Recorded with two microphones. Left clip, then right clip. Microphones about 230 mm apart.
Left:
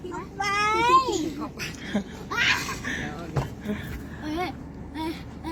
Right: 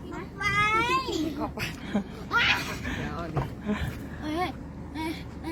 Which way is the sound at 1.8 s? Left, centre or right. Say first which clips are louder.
Left 2 dB; centre.